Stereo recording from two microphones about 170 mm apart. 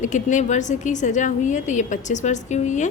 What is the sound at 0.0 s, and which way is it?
A woman's voice, 45° left (ahead or behind).